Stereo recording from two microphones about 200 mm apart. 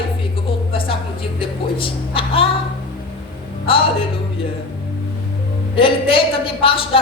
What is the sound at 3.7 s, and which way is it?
Speech, 25° left (ahead or behind).